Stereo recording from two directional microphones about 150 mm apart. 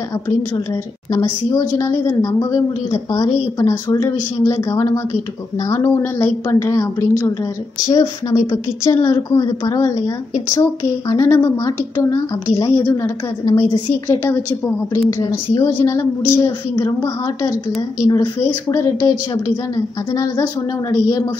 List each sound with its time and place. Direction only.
1.1 s a woman's voice: 25° left (ahead or behind)